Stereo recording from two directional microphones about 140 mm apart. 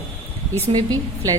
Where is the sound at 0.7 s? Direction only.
25° right (ahead or behind).